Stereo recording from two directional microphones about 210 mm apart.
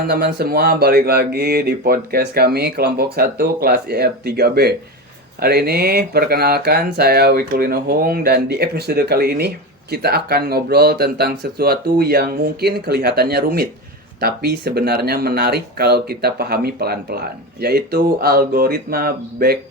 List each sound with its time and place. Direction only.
0.1 s speech: 50° right (ahead or behind)